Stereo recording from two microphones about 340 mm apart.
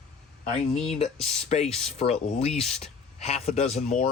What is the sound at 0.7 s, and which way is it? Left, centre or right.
Speech, centre.